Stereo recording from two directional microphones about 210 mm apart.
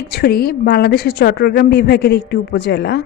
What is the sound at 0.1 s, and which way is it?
A woman's voice, 45° left (ahead or behind).